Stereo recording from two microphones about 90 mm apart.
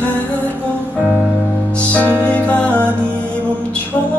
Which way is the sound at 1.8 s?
15° left (ahead or behind).